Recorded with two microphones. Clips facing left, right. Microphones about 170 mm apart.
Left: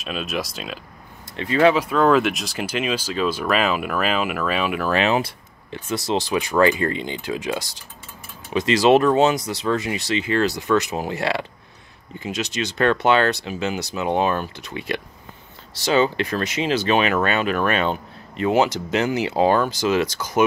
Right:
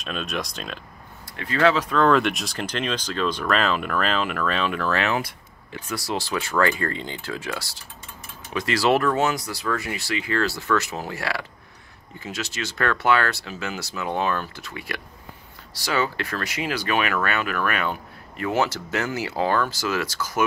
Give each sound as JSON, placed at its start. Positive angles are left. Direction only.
{"t": 0.0, "sound": "speech", "side_deg": 5}
{"t": 1.3, "sound": "speech", "side_deg": 20}